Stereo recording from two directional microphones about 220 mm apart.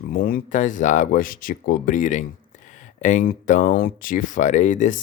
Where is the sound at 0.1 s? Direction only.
40° left (ahead or behind).